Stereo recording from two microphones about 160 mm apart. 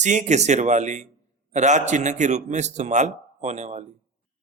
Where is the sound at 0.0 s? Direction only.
50° right (ahead or behind).